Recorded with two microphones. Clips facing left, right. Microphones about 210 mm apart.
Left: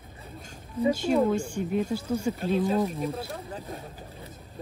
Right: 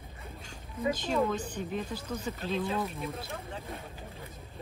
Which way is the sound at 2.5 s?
45° left (ahead or behind).